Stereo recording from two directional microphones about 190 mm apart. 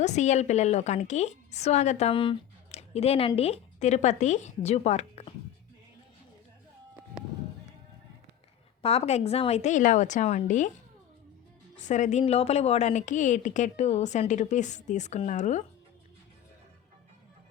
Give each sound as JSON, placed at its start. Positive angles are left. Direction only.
{"t": 0.0, "sound": "a woman's voice", "side_deg": 35}
{"t": 8.8, "sound": "a woman's voice", "side_deg": 30}
{"t": 11.8, "sound": "a woman's voice", "side_deg": 40}